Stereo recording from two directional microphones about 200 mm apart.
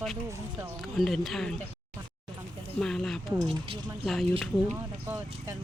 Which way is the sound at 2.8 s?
Centre (ahead or behind).